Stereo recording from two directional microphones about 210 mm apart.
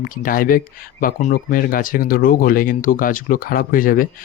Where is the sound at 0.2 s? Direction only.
40° left (ahead or behind).